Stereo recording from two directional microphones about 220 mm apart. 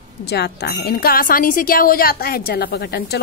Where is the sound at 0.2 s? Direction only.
45° left (ahead or behind).